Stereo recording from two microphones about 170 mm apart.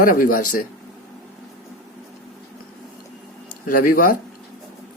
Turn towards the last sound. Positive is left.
turn(degrees=55)  # may be behind; listen again after turning